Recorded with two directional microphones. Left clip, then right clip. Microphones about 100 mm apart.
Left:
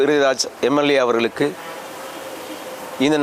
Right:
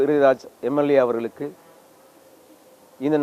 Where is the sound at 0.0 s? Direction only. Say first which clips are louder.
Left 1 dB; 15° left (ahead or behind).